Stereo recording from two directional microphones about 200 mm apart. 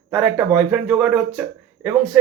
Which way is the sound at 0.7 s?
5° right (ahead or behind).